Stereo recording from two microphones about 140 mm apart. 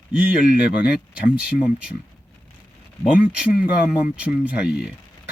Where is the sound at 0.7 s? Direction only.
90° left.